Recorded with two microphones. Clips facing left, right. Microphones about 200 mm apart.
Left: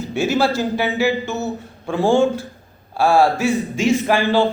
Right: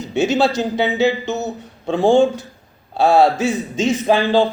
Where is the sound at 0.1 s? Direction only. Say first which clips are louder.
Right 2 dB; 20° right (ahead or behind).